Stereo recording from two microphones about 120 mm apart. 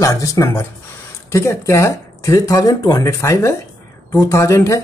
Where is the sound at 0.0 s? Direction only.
25° left (ahead or behind).